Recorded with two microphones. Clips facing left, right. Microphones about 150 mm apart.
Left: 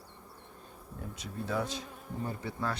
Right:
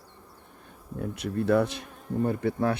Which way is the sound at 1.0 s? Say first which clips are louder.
Right 11 dB; 65° right (ahead or behind).